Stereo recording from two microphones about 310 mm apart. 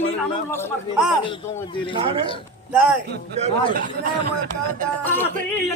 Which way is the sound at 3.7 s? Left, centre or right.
Right.